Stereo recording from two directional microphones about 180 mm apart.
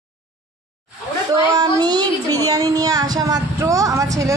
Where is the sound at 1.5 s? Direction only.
25° right (ahead or behind).